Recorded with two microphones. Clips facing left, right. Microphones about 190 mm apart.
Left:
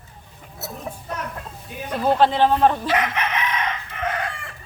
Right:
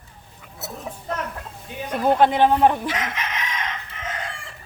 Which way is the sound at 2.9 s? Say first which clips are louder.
Left 5 dB; 60° left (ahead or behind).